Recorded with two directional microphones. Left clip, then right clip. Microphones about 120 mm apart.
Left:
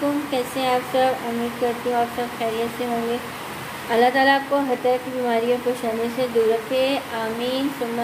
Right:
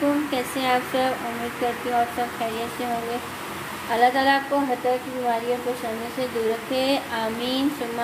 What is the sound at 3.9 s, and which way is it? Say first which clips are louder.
Speech: left 2 dB; 10° left (ahead or behind).